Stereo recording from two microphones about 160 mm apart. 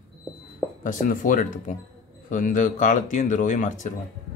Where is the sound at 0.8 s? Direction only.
55° left (ahead or behind).